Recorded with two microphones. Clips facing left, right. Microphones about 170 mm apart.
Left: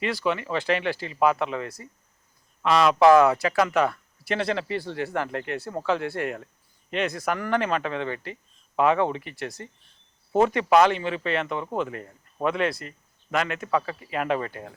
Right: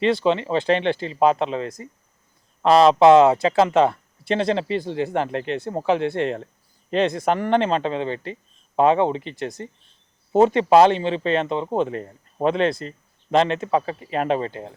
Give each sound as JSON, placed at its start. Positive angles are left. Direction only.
{"t": 0.0, "sound": "speech", "side_deg": -25}
{"t": 2.6, "sound": "speech", "side_deg": -35}